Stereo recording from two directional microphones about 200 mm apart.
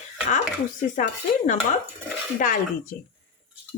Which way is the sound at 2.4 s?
40° left (ahead or behind).